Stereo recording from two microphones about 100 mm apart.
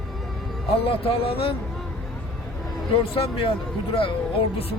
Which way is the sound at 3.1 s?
65° left (ahead or behind).